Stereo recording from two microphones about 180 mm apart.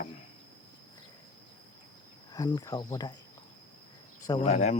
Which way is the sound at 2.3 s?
20° left (ahead or behind).